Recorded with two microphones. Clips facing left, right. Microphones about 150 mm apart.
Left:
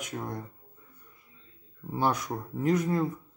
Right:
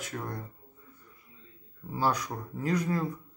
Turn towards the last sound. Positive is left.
turn(degrees=25)  # may be behind; listen again after turning